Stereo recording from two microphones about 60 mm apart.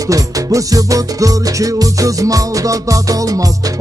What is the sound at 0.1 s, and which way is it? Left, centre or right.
Music, right.